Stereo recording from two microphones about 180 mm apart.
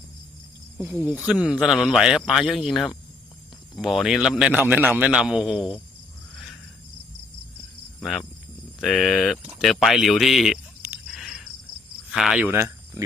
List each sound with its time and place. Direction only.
0.8 s speech: 15° right (ahead or behind)
8.0 s speech: centre (ahead or behind)
12.1 s speech: centre (ahead or behind)
12.5 s speech: 15° right (ahead or behind)